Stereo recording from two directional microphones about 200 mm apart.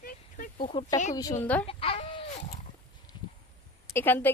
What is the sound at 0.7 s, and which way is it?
Speech, 25° left (ahead or behind).